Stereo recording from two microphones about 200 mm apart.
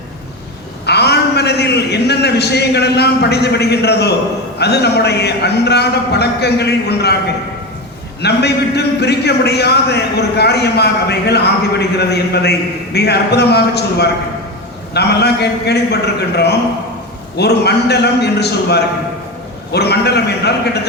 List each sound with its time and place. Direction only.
0.9 s a man's voice: 55° left (ahead or behind)